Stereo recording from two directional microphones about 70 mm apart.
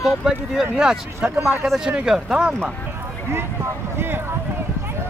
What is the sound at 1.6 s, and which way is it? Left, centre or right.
Speech, centre.